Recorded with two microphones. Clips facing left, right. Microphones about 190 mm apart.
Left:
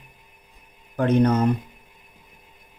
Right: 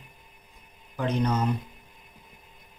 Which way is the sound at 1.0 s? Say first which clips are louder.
Left 8 dB; 55° left (ahead or behind).